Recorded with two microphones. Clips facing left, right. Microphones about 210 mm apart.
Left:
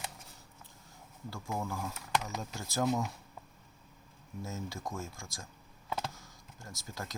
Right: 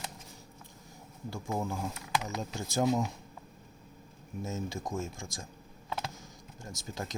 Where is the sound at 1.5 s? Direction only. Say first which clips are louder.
Right 3 dB; 20° right (ahead or behind).